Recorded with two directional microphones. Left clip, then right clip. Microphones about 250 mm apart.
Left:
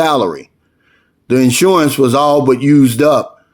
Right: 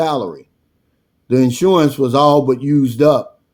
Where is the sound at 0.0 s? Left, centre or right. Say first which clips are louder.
Left 5 dB; left.